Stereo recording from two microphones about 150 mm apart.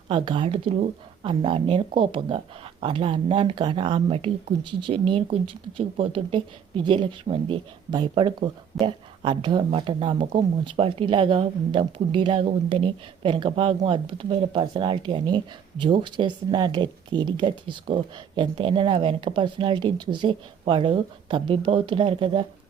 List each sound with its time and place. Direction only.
0.1 s speech: 35° right (ahead or behind)